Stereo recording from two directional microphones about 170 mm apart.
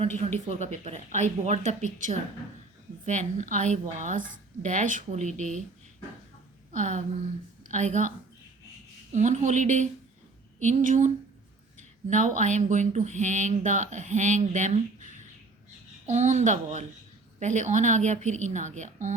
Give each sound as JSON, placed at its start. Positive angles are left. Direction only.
{"t": 0.7, "sound": "speech", "side_deg": -40}
{"t": 6.7, "sound": "a woman's voice", "side_deg": -45}
{"t": 9.1, "sound": "speech", "side_deg": -45}
{"t": 16.0, "sound": "speech", "side_deg": -40}